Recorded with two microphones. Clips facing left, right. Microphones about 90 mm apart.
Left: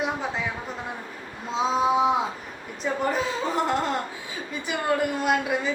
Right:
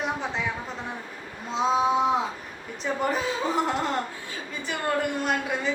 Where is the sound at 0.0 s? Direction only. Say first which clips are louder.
Left 1 dB; 5° left (ahead or behind).